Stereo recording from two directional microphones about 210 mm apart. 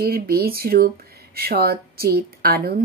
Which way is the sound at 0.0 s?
45° right (ahead or behind).